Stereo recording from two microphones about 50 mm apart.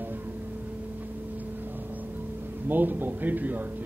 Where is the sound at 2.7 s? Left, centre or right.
Right.